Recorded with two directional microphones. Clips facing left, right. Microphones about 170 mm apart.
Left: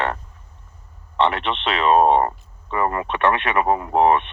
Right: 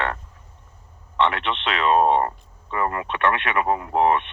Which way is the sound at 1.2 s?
35° left (ahead or behind).